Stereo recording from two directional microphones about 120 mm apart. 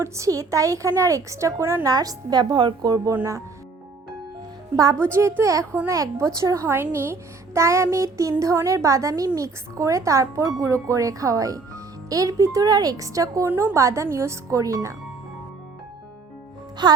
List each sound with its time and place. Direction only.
0.0 s a woman's voice: 25° right (ahead or behind)
5.1 s a woman's voice: 20° right (ahead or behind)
13.5 s a woman's voice: 15° right (ahead or behind)
16.8 s speech: 40° right (ahead or behind)